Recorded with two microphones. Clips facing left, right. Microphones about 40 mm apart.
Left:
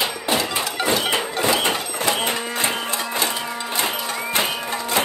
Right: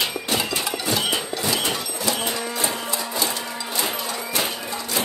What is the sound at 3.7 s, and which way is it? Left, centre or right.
Music, left.